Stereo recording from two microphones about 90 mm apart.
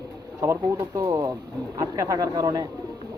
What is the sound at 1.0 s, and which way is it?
Speech, 45° right (ahead or behind).